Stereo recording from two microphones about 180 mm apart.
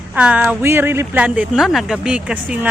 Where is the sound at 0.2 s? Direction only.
5° right (ahead or behind).